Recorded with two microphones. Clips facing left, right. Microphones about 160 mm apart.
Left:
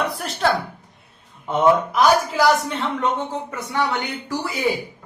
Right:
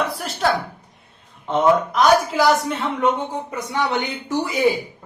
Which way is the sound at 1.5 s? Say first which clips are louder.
Even; 5° left (ahead or behind).